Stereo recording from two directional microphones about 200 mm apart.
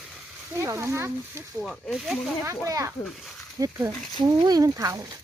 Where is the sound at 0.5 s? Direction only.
15° right (ahead or behind).